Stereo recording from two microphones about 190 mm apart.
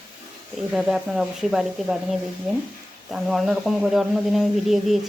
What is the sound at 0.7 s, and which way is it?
Speech, 5° right (ahead or behind).